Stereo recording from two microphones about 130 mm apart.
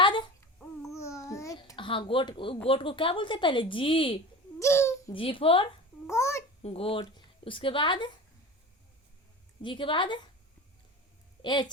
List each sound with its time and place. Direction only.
0.0 s babbling: 40° left (ahead or behind)
0.9 s babbling: 25° left (ahead or behind)
1.7 s a woman's voice: 40° left (ahead or behind)
4.6 s a child's voice: 20° left (ahead or behind)
5.1 s speech: 45° left (ahead or behind)
6.1 s a child's voice: 20° left (ahead or behind)
6.6 s a child's voice: 50° left (ahead or behind)
9.6 s a woman's voice: 40° left (ahead or behind)
11.4 s a woman's voice: 35° left (ahead or behind)